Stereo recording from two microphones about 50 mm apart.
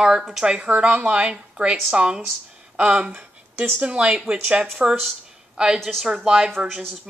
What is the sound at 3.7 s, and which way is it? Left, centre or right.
Speech, right.